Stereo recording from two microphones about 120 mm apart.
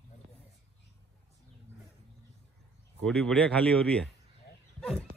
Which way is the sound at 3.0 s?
5° left (ahead or behind).